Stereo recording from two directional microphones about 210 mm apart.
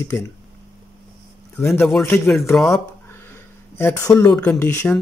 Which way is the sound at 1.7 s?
Centre (ahead or behind).